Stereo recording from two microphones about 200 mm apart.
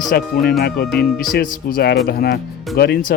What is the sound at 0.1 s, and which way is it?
Speech, 50° left (ahead or behind).